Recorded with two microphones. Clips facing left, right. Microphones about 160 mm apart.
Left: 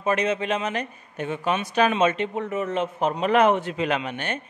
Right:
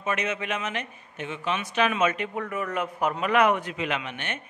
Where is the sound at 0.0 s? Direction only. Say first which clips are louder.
Left 6 dB; 35° left (ahead or behind).